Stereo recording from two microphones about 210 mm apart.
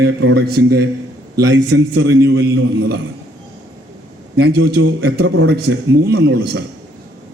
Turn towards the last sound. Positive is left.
turn(degrees=-55)  # may be behind; listen again after turning